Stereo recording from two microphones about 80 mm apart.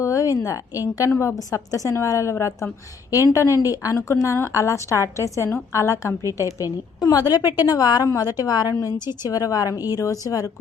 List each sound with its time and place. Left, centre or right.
0.0 s a woman's voice: left